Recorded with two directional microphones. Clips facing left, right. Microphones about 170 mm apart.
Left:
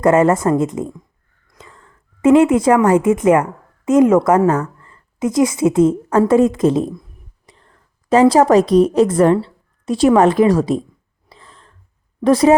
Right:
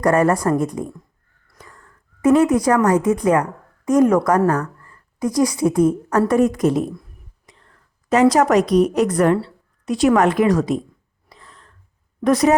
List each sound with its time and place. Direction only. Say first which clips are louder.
0.0 s a woman's voice: left 3 dB; 25° left (ahead or behind)
1.5 s a sound: left 2 dB; 25° left (ahead or behind)
3.2 s a woman's voice: left 4 dB; 20° left (ahead or behind)
7.5 s whispering: left 2 dB; 30° left (ahead or behind)
8.1 s a woman's voice: left 4 dB; 30° left (ahead or behind)
11.3 s a sound: left 2 dB; 30° left (ahead or behind)
12.2 s a woman's voice: left 4 dB; 30° left (ahead or behind)